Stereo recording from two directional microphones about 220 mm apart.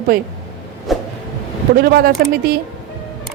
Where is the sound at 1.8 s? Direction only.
45° right (ahead or behind).